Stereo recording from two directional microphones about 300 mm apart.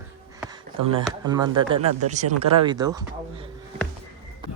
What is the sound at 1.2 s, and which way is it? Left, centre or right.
Speech, centre.